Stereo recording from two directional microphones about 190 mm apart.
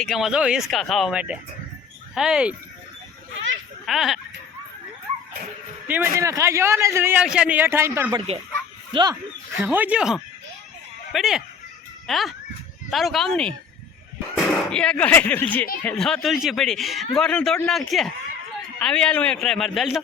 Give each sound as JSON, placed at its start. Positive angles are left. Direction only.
{"t": 0.0, "sound": "a man's voice", "side_deg": 0}
{"t": 3.8, "sound": "a man's voice", "side_deg": 0}
{"t": 5.9, "sound": "a man's voice", "side_deg": -15}
{"t": 9.6, "sound": "a man's voice", "side_deg": -10}